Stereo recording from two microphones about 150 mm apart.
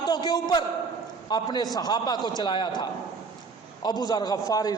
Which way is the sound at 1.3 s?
30° left (ahead or behind).